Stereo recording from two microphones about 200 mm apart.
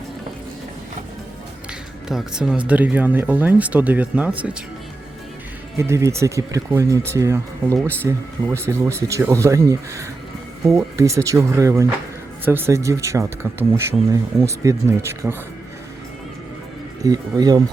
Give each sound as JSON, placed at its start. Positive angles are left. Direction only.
{"t": 2.0, "sound": "speech", "side_deg": -5}
{"t": 5.7, "sound": "speech", "side_deg": -15}
{"t": 17.0, "sound": "speech", "side_deg": -20}